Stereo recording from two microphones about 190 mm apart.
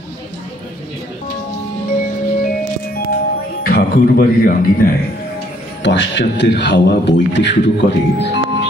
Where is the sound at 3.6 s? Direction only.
55° left (ahead or behind).